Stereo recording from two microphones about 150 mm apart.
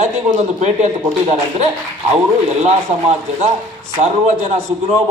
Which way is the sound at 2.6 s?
45° right (ahead or behind).